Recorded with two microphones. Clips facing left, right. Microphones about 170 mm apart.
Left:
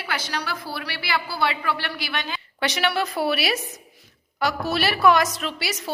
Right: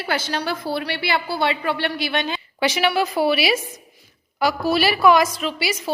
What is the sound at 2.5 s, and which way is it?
A woman's voice, 5° right (ahead or behind).